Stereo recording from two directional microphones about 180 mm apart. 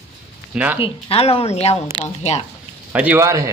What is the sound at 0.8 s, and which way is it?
Speech, 30° left (ahead or behind).